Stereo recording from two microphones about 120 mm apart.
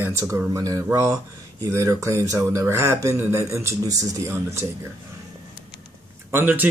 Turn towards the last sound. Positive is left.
turn(degrees=-15)  # may be behind; listen again after turning